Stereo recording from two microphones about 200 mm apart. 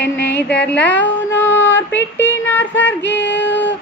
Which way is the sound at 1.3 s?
10° left (ahead or behind).